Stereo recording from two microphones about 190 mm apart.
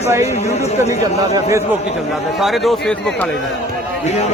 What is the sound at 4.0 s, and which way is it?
Speech, 35° left (ahead or behind).